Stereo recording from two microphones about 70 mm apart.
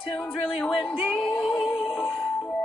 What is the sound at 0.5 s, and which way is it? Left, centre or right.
Speech, centre.